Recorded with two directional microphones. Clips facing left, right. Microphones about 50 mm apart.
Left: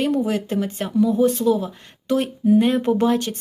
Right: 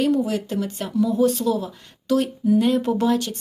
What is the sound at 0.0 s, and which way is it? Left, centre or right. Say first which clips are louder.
A woman's voice: even; left.